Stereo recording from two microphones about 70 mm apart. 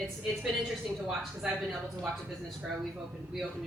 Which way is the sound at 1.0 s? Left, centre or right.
Centre.